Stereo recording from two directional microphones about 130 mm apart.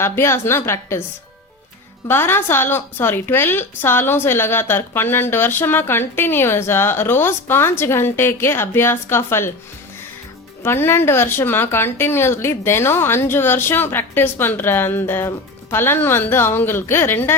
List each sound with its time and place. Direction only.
0.0 s a woman's voice: 20° left (ahead or behind)
2.0 s a woman's voice: 15° left (ahead or behind)
10.6 s a woman's voice: 20° left (ahead or behind)